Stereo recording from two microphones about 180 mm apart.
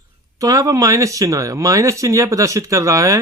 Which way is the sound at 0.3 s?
20° right (ahead or behind).